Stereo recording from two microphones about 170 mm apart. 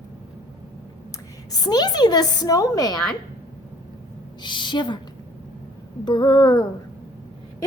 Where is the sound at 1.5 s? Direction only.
25° left (ahead or behind).